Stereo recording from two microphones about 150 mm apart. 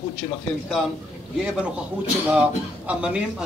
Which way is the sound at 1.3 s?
5° right (ahead or behind).